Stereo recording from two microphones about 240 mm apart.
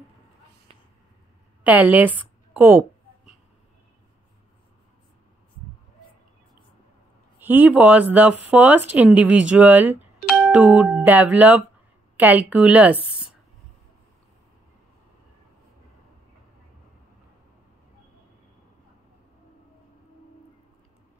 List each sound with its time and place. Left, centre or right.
0.7 s a sound: right
1.6 s a woman's voice: centre
7.3 s speech: centre